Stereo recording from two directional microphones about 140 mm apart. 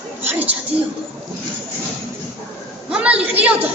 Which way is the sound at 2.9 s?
10° right (ahead or behind).